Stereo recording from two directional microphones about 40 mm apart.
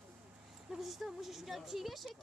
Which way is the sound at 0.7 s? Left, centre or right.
Centre.